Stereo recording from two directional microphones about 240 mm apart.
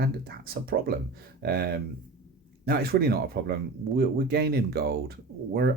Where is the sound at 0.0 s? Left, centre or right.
Right.